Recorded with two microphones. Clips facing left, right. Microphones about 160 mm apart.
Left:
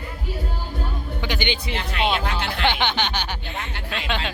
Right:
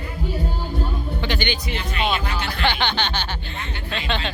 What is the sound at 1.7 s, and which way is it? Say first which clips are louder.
Speech: left 2 dB; 90° left.